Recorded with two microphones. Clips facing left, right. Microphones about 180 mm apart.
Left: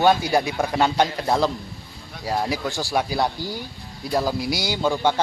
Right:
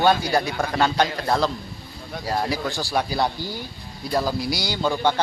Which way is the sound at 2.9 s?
5° left (ahead or behind).